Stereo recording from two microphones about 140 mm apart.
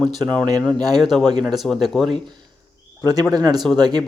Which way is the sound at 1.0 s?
Centre (ahead or behind).